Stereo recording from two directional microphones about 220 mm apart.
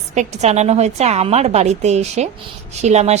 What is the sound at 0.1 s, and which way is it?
A woman's voice, 30° right (ahead or behind).